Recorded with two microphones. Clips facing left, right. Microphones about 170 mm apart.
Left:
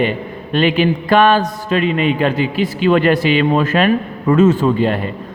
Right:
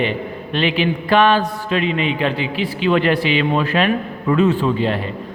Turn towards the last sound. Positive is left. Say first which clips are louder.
# left 4 dB
turn(degrees=50)  # may be behind; listen again after turning